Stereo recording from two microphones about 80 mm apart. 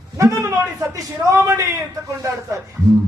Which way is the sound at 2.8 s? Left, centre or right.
Right.